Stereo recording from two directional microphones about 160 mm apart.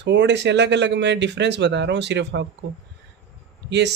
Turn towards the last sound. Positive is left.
turn(degrees=-90)